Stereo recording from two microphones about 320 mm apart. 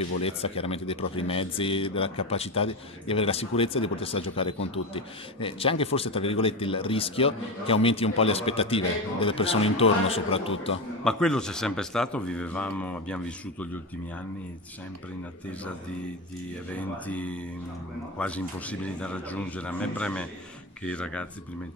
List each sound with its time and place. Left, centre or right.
0.2 s a man's voice: centre
11.1 s a man's voice: centre
16.7 s a man's voice: centre